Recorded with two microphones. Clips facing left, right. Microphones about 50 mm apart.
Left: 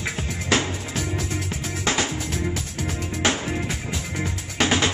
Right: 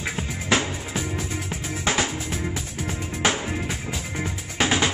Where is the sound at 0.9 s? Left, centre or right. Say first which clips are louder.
Left 1 dB; centre.